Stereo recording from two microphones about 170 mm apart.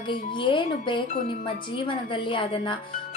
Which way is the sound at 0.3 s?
30° left (ahead or behind).